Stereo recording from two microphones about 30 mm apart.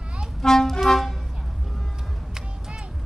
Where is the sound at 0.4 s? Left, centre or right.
Centre.